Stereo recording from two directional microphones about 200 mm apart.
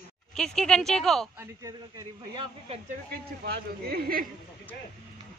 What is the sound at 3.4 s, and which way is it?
Speech, 50° right (ahead or behind).